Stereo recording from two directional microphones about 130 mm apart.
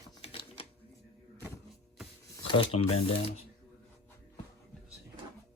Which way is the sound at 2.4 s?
45° left (ahead or behind).